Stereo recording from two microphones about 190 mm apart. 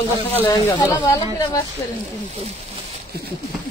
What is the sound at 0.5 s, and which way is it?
Speech, 15° left (ahead or behind).